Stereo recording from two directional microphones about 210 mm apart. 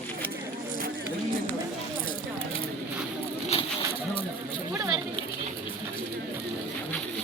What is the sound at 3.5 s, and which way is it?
Bird, 25° left (ahead or behind).